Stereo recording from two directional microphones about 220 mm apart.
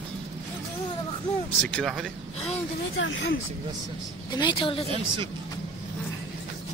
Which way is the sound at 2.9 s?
60° left (ahead or behind).